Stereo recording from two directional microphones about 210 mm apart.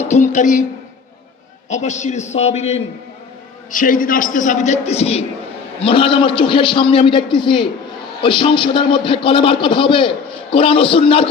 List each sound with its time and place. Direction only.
0.0 s a man's voice: 35° left (ahead or behind)
1.7 s a man's voice: 35° left (ahead or behind)